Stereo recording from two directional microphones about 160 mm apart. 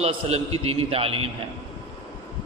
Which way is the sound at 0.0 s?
40° right (ahead or behind).